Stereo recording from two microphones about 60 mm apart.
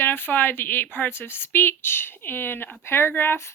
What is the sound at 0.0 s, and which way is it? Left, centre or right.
Speech, left.